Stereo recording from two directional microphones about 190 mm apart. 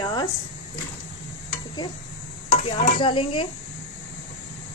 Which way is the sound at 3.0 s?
25° left (ahead or behind).